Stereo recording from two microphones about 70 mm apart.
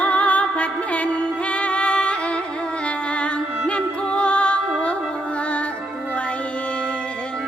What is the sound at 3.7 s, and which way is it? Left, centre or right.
Music, centre.